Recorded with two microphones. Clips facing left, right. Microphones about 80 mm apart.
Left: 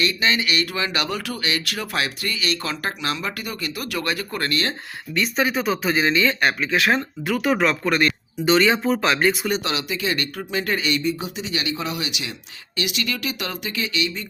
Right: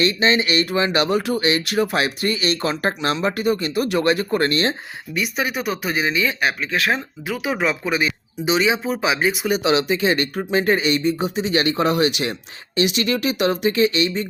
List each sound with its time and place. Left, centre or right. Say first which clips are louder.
0.0 s speech: right 4 dB; right
5.1 s speech: left 2 dB; centre
9.6 s speech: right 7 dB; right
12.7 s speech: right 7 dB; right